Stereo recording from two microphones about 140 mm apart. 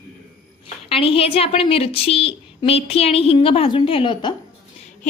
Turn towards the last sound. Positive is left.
turn(degrees=35)  # may be behind; listen again after turning